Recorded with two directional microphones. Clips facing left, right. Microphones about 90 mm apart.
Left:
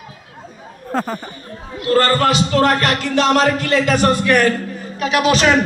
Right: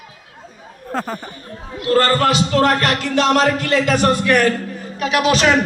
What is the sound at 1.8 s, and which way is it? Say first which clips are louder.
A man's voice: even; 40° left (ahead or behind).